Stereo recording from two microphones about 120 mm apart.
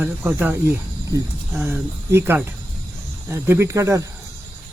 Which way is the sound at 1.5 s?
10° right (ahead or behind).